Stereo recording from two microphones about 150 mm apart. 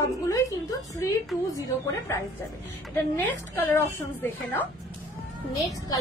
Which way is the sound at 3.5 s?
15° left (ahead or behind).